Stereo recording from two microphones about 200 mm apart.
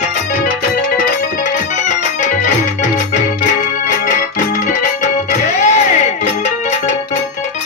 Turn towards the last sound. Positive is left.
turn(degrees=35)  # may be behind; listen again after turning